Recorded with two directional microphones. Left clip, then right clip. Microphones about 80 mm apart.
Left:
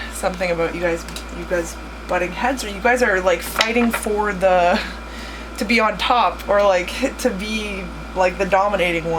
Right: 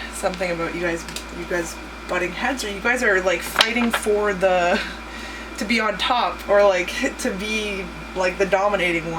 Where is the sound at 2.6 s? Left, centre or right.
Left.